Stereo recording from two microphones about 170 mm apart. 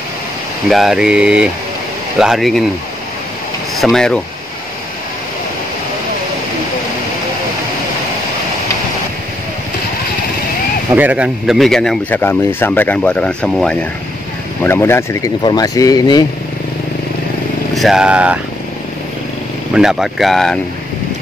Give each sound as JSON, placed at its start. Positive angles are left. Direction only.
{"t": 0.7, "sound": "speech", "side_deg": 0}
{"t": 3.8, "sound": "speech", "side_deg": 5}
{"t": 10.9, "sound": "speech", "side_deg": -10}
{"t": 17.7, "sound": "speech", "side_deg": 0}
{"t": 19.7, "sound": "speech", "side_deg": -5}